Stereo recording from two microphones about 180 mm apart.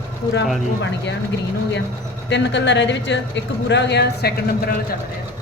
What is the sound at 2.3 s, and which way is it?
A woman's voice, 75° left (ahead or behind).